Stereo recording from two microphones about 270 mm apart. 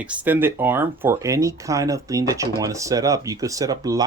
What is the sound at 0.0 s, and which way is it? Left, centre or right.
Speech, centre.